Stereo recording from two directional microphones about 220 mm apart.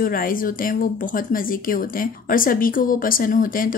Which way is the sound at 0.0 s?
40° left (ahead or behind).